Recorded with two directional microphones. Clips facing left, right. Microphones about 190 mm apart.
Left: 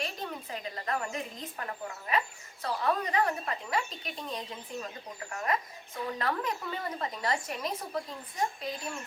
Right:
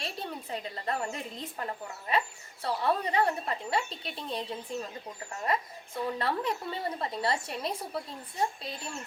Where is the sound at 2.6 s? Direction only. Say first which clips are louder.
Right 1 dB; 30° right (ahead or behind).